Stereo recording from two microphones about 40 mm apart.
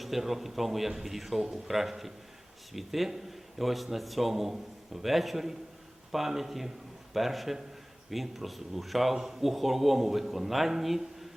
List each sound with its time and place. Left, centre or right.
0.0 s a man's voice: centre